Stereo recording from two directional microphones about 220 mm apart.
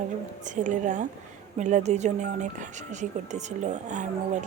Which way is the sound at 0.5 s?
35° right (ahead or behind).